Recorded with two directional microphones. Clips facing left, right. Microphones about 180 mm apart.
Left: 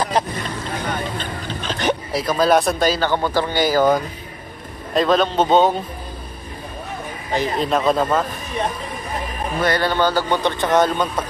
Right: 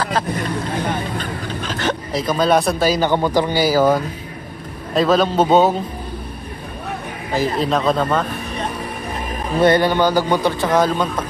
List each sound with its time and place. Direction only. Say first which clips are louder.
0.2 s speech: right 1 dB; 20° left (ahead or behind)
2.1 s a man's voice: right 1 dB; centre (ahead or behind)
2.9 s a man's voice: right 3 dB; 10° right (ahead or behind)
7.3 s a man's voice: right 1 dB; centre (ahead or behind)
9.6 s a man's voice: right 5 dB; 20° right (ahead or behind); by 11.1 s centre (ahead or behind)